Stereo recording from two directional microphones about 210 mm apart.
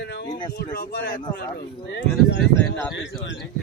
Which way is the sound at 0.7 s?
40° left (ahead or behind).